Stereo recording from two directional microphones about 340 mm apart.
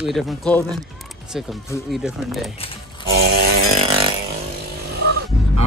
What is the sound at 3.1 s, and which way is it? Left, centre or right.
Chainsaw, right.